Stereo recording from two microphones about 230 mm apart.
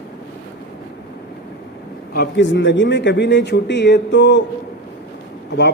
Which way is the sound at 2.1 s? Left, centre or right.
Left.